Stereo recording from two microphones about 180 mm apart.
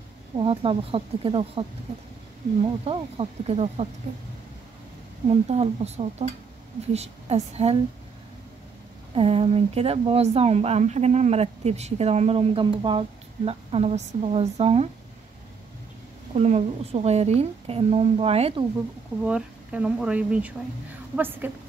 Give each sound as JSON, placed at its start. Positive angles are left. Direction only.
{"t": 0.4, "sound": "speech", "side_deg": -30}
{"t": 5.5, "sound": "speech", "side_deg": -35}
{"t": 9.1, "sound": "speech", "side_deg": -30}
{"t": 16.3, "sound": "speech", "side_deg": -35}
{"t": 19.2, "sound": "speech", "side_deg": -5}